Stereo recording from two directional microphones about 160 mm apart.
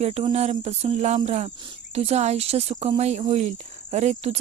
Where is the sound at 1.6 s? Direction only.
40° right (ahead or behind).